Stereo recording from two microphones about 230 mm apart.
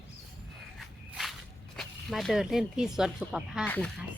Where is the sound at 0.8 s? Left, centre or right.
Centre.